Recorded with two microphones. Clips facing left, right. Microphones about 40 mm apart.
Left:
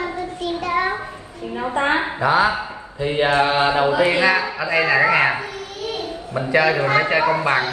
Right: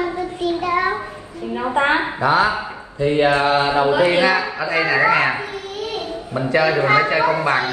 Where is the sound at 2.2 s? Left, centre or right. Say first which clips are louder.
Even; centre.